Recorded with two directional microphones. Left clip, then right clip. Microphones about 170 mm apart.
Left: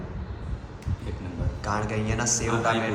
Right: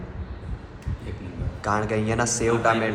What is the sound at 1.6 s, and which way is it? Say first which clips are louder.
A man's voice: right 5 dB; 5° left (ahead or behind).